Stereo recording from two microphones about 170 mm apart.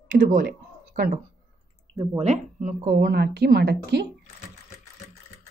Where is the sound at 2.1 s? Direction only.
45° right (ahead or behind); by 4.1 s 85° right.